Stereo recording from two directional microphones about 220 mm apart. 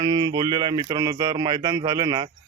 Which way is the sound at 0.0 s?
20° right (ahead or behind).